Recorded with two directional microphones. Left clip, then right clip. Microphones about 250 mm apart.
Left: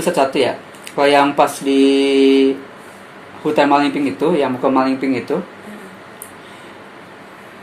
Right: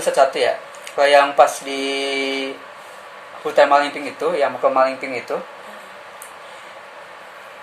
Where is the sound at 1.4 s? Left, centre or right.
Left.